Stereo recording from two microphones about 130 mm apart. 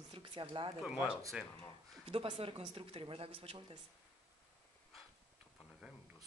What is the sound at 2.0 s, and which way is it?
Speech, 45° right (ahead or behind).